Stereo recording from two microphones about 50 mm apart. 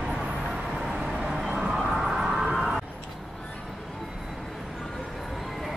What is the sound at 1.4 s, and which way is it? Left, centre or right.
Vehicle, right.